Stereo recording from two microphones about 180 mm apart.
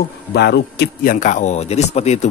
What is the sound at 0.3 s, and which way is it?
Speech, 65° left (ahead or behind).